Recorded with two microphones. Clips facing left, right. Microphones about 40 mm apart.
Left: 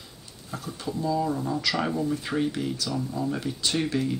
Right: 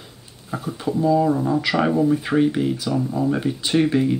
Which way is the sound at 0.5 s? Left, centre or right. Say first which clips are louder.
Right 8 dB; right.